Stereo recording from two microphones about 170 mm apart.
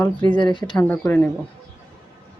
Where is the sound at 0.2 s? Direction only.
25° left (ahead or behind).